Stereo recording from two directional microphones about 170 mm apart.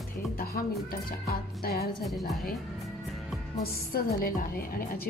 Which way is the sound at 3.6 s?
60° left (ahead or behind).